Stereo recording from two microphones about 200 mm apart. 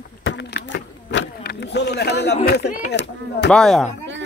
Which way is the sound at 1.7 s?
55° left (ahead or behind).